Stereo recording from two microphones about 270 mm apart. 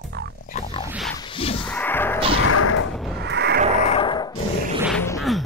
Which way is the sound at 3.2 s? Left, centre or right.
Right.